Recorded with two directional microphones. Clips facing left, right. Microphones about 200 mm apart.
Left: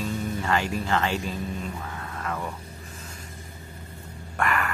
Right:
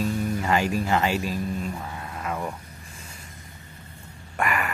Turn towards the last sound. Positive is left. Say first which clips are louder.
# even
turn(degrees=-15)  # may be behind; listen again after turning